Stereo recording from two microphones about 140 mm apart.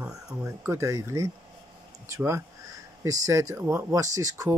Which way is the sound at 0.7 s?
20° right (ahead or behind).